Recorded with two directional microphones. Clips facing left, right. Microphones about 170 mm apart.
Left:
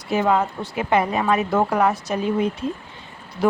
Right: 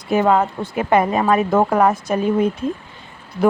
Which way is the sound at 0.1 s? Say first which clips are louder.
Right 4 dB; 50° right (ahead or behind).